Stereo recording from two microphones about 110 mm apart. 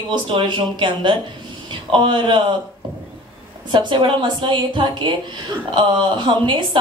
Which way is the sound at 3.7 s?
45° right (ahead or behind).